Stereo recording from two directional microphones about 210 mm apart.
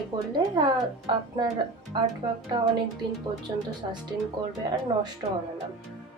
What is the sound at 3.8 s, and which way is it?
Speech, 25° right (ahead or behind).